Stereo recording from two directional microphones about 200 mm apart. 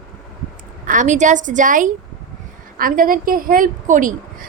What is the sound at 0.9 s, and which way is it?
A woman's voice, 40° right (ahead or behind).